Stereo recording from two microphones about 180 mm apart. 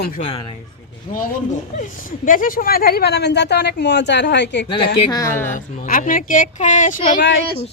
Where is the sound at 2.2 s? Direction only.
50° left (ahead or behind); by 4.6 s 75° left (ahead or behind).